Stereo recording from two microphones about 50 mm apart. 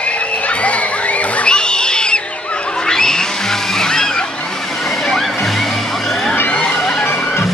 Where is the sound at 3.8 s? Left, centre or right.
Centre.